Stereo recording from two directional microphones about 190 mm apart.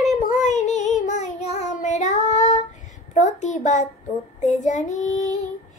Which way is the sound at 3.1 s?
40° left (ahead or behind).